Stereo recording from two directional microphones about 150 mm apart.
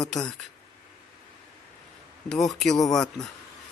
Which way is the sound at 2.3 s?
Centre (ahead or behind).